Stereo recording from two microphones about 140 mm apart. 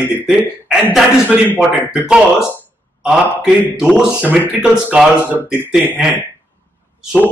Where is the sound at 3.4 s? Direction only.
5° right (ahead or behind).